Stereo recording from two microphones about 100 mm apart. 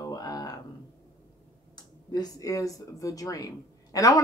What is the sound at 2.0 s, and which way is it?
Speech, 40° left (ahead or behind).